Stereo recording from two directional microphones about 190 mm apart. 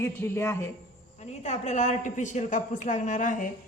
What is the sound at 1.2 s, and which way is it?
A woman's voice, 35° left (ahead or behind).